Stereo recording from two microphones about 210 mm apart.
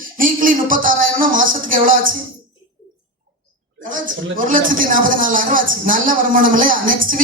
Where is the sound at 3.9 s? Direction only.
40° right (ahead or behind).